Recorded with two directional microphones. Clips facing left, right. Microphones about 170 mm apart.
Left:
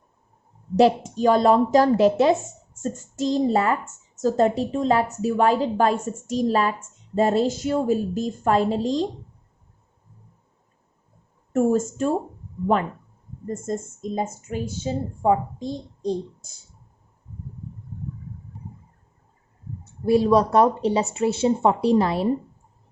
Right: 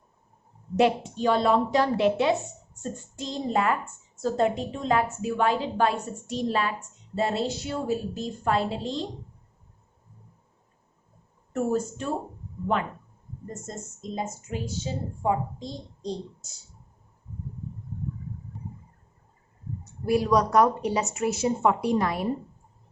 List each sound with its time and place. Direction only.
0.8 s a woman's voice: 40° left (ahead or behind)
11.5 s a woman's voice: 45° left (ahead or behind)
13.5 s a woman's voice: 50° left (ahead or behind)
15.5 s a child's voice: 55° left (ahead or behind)
19.8 s speech: 30° left (ahead or behind)